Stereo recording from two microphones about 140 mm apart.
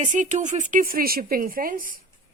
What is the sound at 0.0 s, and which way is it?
A woman's voice, 60° right (ahead or behind).